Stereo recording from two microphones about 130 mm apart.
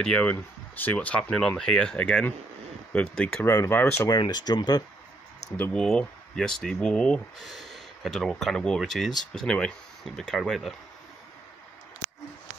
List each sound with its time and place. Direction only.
0.0 s speech: 10° left (ahead or behind)
4.1 s speech: 30° left (ahead or behind)
5.6 s speech: 5° left (ahead or behind)